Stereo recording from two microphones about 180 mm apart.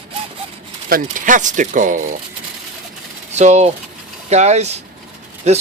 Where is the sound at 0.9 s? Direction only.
50° right (ahead or behind).